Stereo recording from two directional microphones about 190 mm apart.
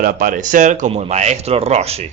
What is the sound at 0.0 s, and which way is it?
Speech, 50° right (ahead or behind).